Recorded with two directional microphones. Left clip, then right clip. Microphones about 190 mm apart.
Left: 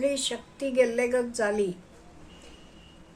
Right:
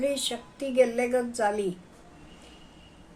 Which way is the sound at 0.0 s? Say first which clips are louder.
Left 1 dB; 5° left (ahead or behind).